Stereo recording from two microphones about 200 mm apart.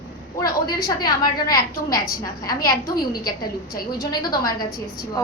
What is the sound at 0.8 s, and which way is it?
Speech, 20° left (ahead or behind).